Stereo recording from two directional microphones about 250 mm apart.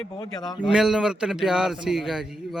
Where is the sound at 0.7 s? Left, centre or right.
Centre.